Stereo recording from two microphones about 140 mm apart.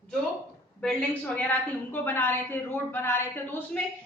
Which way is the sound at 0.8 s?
10° left (ahead or behind).